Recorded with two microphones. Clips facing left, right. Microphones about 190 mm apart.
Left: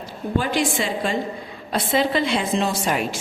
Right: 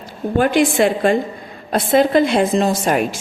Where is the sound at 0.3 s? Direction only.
60° right (ahead or behind).